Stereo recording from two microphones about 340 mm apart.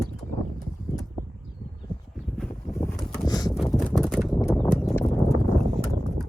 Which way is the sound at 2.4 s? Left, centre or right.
Centre.